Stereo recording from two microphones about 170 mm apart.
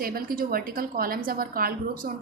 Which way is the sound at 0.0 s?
60° right (ahead or behind).